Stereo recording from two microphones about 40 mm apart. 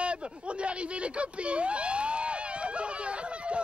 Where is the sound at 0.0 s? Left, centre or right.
Right.